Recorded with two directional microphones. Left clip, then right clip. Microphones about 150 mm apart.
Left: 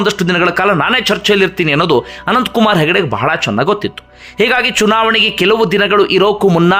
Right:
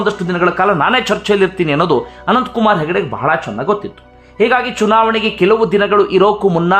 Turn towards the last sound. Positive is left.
turn(degrees=15)  # may be behind; listen again after turning